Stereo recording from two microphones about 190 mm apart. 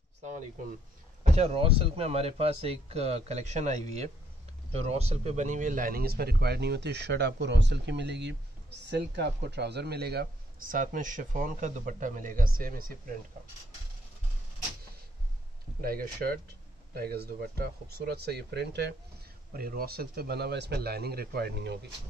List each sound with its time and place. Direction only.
1.3 s a man's voice: 30° right (ahead or behind); by 12.9 s 50° right (ahead or behind)
15.8 s a man's voice: 50° right (ahead or behind)